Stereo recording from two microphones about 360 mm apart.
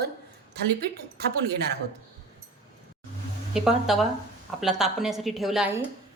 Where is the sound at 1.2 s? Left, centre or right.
Right.